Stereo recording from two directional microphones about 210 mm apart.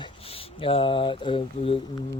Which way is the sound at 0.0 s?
25° left (ahead or behind).